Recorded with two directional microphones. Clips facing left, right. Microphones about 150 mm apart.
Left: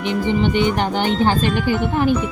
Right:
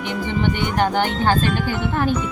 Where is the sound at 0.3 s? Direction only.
20° left (ahead or behind).